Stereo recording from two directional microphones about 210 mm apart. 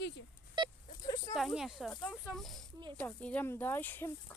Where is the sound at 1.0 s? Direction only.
20° left (ahead or behind).